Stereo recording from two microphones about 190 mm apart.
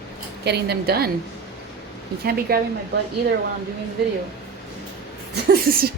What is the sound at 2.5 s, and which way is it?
Speech, 55° right (ahead or behind).